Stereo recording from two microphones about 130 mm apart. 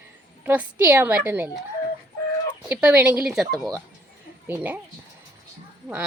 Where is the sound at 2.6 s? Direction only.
10° right (ahead or behind).